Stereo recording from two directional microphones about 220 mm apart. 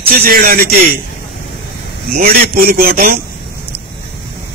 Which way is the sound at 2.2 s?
40° right (ahead or behind).